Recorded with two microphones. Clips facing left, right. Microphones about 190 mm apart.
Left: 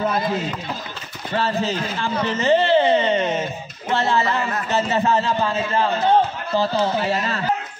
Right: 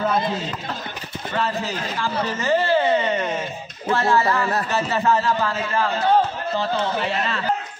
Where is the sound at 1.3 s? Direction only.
25° left (ahead or behind).